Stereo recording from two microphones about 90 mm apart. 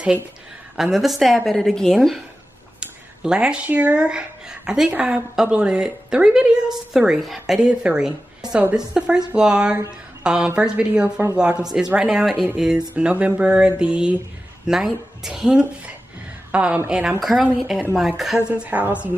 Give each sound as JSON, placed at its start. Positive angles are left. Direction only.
{"t": 0.9, "sound": "a woman's voice", "side_deg": 0}
{"t": 2.8, "sound": "a woman's voice", "side_deg": -10}
{"t": 17.2, "sound": "a woman's voice", "side_deg": -5}
{"t": 18.6, "sound": "speech", "side_deg": -15}